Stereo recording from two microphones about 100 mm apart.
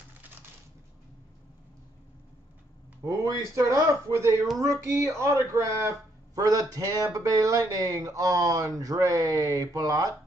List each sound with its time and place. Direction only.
3.0 s speech: 30° right (ahead or behind)